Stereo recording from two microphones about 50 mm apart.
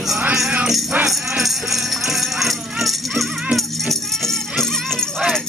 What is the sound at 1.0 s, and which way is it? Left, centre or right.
Music, centre.